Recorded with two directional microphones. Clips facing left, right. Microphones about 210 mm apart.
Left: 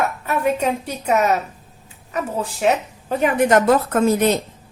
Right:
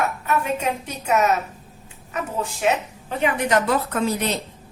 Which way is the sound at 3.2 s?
50° left (ahead or behind).